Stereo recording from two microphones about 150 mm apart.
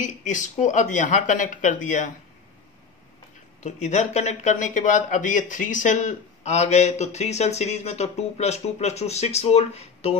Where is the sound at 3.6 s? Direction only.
50° left (ahead or behind).